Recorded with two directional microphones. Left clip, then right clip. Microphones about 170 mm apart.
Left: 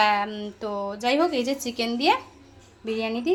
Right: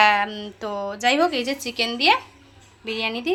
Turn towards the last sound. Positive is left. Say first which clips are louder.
# right 1 dB
turn(degrees=15)  # may be behind; listen again after turning